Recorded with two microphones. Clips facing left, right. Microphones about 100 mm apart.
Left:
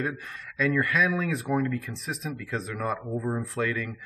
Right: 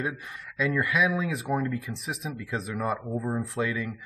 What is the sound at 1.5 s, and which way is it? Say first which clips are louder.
Speech: left 2 dB; 25° right (ahead or behind).